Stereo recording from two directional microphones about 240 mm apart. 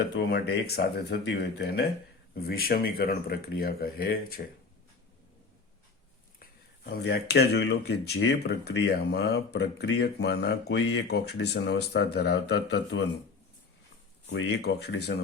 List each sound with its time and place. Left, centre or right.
0.2 s speech: left
6.4 s speech: left
14.3 s speech: left